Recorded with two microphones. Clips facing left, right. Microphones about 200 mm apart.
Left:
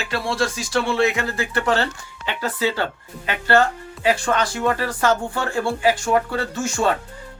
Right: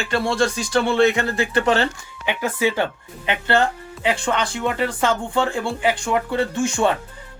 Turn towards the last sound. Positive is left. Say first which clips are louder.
# right 2 dB
turn(degrees=-20)  # may be behind; listen again after turning